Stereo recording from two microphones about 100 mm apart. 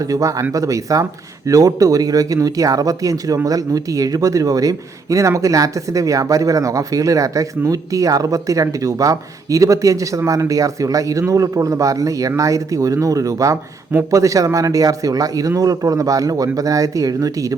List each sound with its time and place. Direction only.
0.0 s speech: 35° right (ahead or behind)